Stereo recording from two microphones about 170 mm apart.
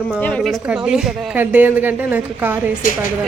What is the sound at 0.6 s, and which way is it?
A woman's voice, 5° right (ahead or behind).